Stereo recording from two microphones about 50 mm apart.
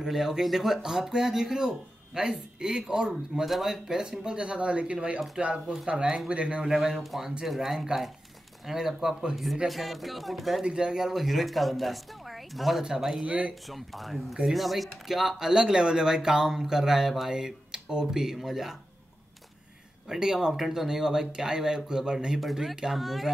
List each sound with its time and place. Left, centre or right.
0.0 s speech: centre
7.0 s speech: centre
10.6 s speech: centre
13.2 s speech: right
13.7 s speech: centre
20.1 s speech: centre
22.4 s speech: centre